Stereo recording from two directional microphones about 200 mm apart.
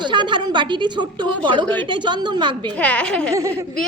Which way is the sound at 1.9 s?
25° right (ahead or behind).